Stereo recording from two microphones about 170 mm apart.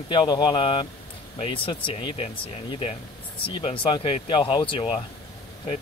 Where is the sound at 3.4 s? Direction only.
30° left (ahead or behind).